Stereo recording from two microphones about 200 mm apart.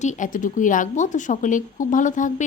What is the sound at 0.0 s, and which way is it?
A woman's voice, 40° left (ahead or behind).